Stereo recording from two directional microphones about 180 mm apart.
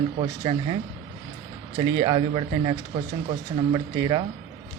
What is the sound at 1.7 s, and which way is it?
Speech, 25° right (ahead or behind).